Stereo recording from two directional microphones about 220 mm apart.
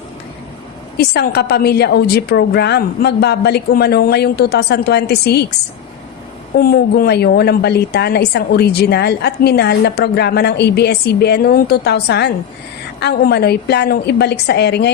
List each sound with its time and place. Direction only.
0.9 s a woman's voice: 45° left (ahead or behind)
6.6 s a woman's voice: 45° left (ahead or behind)